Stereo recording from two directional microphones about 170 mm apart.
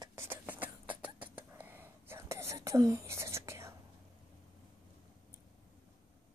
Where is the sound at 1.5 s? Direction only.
10° right (ahead or behind).